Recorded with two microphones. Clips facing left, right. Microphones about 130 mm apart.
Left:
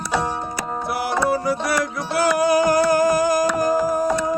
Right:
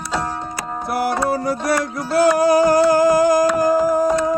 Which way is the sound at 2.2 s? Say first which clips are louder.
Right 3 dB; 30° right (ahead or behind).